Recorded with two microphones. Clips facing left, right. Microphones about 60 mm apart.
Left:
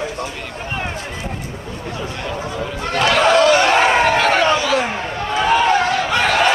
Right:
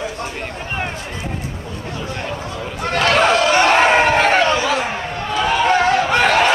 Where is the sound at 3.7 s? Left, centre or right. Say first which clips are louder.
Right 1 dB; right.